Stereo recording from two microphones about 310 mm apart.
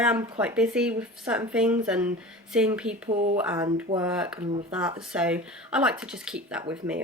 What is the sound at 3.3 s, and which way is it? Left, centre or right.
Speech, centre.